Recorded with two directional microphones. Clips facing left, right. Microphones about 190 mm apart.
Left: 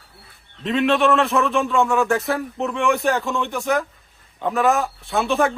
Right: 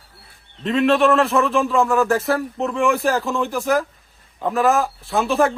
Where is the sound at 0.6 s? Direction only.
Centre (ahead or behind).